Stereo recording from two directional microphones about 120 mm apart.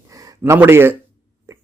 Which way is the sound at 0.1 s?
25° right (ahead or behind).